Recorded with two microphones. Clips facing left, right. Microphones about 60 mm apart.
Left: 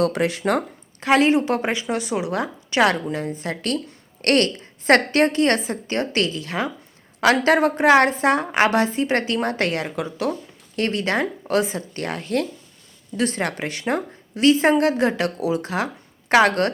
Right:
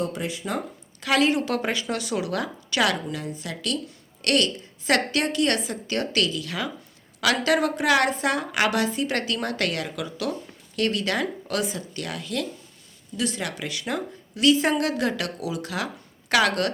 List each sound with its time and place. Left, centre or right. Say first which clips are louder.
0.0 s speech: left 8 dB; left
1.0 s a woman's voice: left 5 dB; left